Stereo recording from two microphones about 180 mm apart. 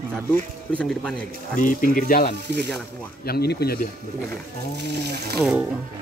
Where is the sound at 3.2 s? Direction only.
60° left (ahead or behind).